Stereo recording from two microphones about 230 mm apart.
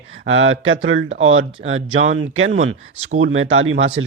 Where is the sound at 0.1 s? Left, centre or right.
Right.